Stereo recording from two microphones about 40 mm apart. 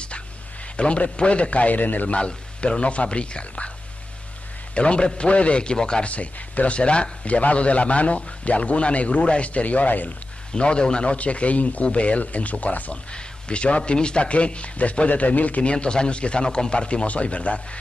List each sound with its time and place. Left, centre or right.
0.7 s a man's voice: left
2.0 s speech: left
4.7 s speech: left
6.0 s a man's voice: left
10.5 s speech: left
11.1 s a man's voice: left
15.7 s speech: left